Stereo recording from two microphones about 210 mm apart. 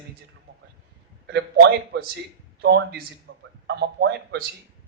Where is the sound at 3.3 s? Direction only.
50° right (ahead or behind).